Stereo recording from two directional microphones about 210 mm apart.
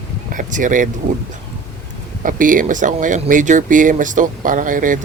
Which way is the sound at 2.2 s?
40° right (ahead or behind).